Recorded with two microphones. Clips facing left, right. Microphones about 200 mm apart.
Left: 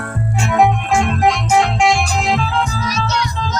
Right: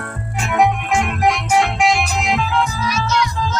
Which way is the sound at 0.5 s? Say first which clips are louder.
Left 2 dB; 25° left (ahead or behind).